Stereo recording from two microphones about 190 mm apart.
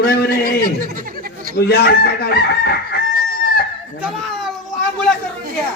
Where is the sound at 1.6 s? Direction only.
55° left (ahead or behind).